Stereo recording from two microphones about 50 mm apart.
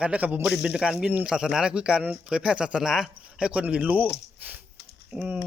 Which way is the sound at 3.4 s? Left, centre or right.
Centre.